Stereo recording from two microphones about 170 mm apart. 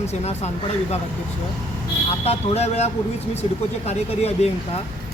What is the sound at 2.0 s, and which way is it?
Speech, 35° left (ahead or behind).